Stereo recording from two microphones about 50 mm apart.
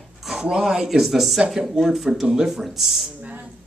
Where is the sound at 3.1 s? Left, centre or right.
Right.